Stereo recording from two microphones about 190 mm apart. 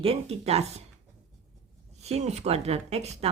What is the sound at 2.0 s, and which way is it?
Speech, 35° right (ahead or behind).